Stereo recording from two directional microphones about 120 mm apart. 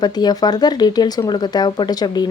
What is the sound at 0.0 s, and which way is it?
Speech, 35° left (ahead or behind).